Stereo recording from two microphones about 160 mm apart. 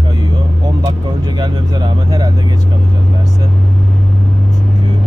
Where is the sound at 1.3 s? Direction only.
25° right (ahead or behind).